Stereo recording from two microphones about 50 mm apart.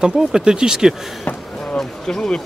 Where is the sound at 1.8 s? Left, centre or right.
Centre.